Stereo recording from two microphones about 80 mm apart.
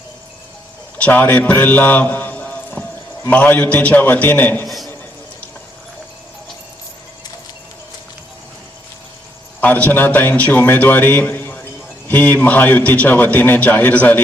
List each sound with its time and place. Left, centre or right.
0.9 s a man's voice: centre
4.6 s a sound: centre
9.6 s a man's voice: left